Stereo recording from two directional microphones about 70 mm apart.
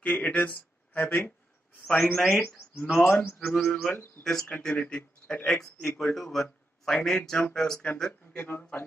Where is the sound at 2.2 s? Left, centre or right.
Centre.